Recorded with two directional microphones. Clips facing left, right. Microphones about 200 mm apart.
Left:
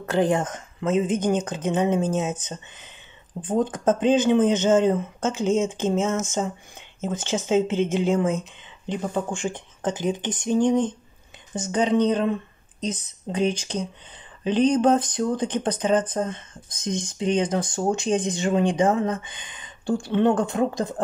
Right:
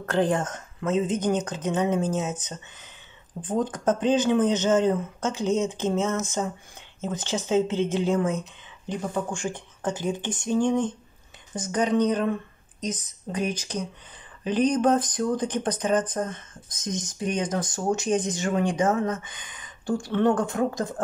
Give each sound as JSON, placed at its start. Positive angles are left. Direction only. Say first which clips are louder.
{"t": 0.0, "sound": "speech", "louder": "left 2 dB", "side_deg": 10}